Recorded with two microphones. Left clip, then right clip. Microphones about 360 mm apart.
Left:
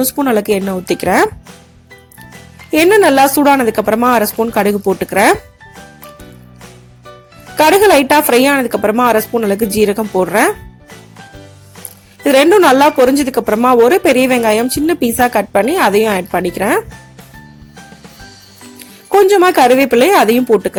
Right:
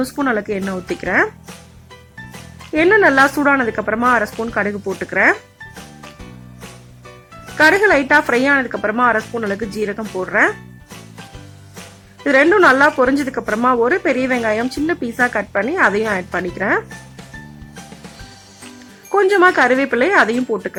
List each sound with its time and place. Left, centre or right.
0.0 s speech: centre
2.7 s speech: centre
7.5 s speech: centre
12.2 s speech: centre
19.1 s speech: centre